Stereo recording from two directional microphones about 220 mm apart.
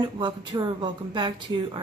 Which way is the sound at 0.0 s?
20° right (ahead or behind).